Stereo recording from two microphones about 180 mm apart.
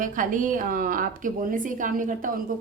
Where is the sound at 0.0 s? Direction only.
45° right (ahead or behind).